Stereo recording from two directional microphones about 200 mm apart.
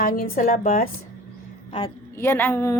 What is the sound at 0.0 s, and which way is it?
Speech, 45° left (ahead or behind).